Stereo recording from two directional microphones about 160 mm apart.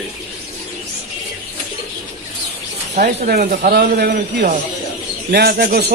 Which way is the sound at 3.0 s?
60° right (ahead or behind).